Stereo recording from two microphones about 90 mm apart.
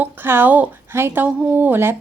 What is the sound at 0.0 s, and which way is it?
A woman's voice, 25° right (ahead or behind).